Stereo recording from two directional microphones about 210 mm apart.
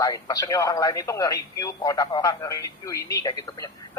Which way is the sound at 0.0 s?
15° left (ahead or behind).